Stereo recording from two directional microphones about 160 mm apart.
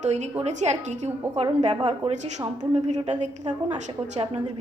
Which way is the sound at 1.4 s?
35° right (ahead or behind).